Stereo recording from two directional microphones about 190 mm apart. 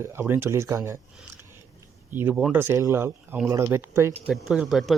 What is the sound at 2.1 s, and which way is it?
Speech, 10° right (ahead or behind).